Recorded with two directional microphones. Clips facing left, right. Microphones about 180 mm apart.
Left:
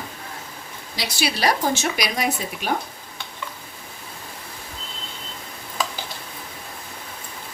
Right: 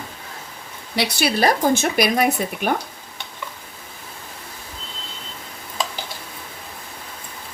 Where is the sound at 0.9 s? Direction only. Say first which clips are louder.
Right 5 dB; 60° right (ahead or behind).